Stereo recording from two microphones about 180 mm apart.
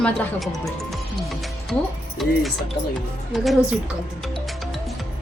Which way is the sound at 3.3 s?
Centre (ahead or behind).